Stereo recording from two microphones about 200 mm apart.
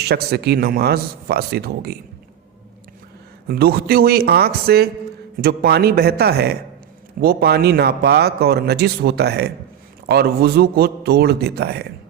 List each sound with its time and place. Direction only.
0.0 s a man's voice: 50° right (ahead or behind)
3.5 s a man's voice: 50° right (ahead or behind)